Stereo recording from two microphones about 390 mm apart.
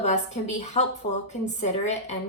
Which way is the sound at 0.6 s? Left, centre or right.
Centre.